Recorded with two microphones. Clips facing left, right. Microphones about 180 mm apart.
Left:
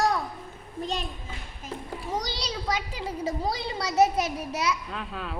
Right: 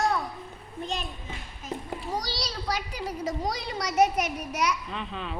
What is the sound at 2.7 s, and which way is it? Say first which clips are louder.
A child's voice: even; 25° left (ahead or behind).